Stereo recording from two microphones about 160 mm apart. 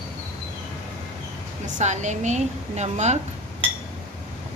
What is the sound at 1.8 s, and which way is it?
Cutlery, 50° right (ahead or behind).